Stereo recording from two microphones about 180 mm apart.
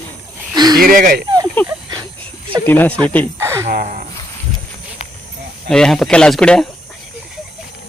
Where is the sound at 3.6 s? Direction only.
45° right (ahead or behind).